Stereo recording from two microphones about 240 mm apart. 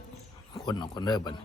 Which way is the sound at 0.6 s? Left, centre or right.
Centre.